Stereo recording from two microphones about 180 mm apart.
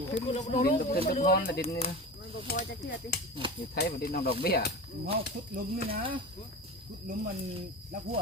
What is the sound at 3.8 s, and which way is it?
Speech, 60° left (ahead or behind).